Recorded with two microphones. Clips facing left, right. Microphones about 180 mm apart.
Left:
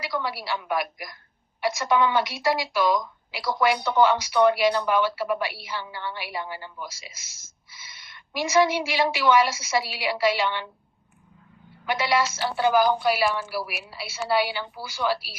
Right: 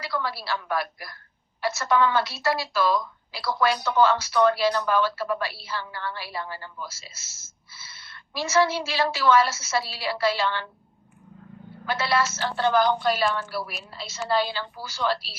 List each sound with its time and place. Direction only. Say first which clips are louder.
0.0 s speech: left 1 dB; 15° left (ahead or behind)
11.9 s speech: left 1 dB; 15° left (ahead or behind)